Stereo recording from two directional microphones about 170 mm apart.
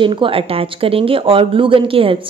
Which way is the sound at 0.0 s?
30° right (ahead or behind).